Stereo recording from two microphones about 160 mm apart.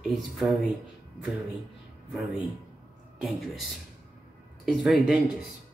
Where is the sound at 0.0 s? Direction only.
Centre (ahead or behind).